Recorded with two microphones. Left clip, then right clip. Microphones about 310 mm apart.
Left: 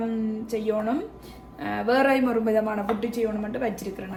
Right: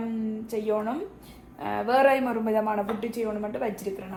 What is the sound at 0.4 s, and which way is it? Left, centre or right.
A woman's voice, centre.